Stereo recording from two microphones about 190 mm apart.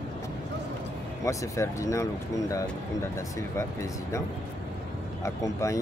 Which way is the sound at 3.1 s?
15° left (ahead or behind).